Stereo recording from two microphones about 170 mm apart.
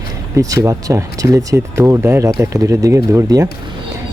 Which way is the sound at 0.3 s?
20° right (ahead or behind).